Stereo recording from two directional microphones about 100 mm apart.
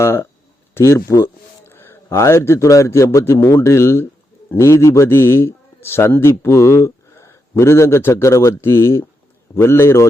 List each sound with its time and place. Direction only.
0.0 s a man's voice: 25° left (ahead or behind)